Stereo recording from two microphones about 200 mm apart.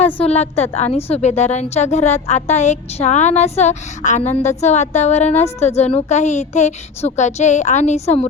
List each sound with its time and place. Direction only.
0.0 s a woman's voice: 30° left (ahead or behind)